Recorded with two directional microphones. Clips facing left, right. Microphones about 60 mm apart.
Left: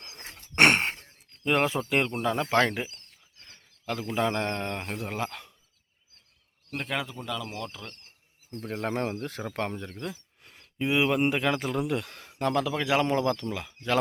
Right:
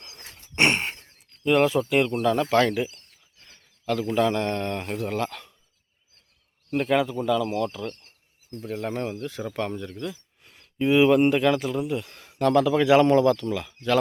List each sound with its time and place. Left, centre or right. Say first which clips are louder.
0.0 s a sound: left 1 dB; left
0.5 s a sound: left 1 dB; left
1.5 s speech: right 5 dB; left
3.4 s a sound: right 6 dB; centre
4.3 s speech: right 4 dB; left; by 5.5 s centre
6.7 s a man's voice: right 10 dB; centre
8.5 s speech: right 1 dB; left
9.5 s speech: right 3 dB; left
10.8 s speech: right 7 dB; centre
11.8 s speech: right 1 dB; left
12.5 s a man's voice: right 9 dB; centre
13.3 s speech: right 5 dB; centre